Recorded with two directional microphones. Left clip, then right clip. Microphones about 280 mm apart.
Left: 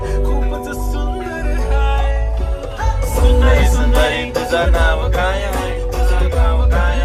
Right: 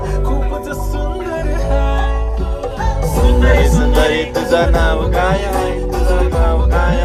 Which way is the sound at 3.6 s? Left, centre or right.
Centre.